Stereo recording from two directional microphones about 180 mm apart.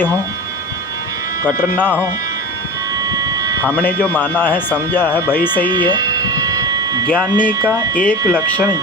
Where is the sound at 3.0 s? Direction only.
20° right (ahead or behind).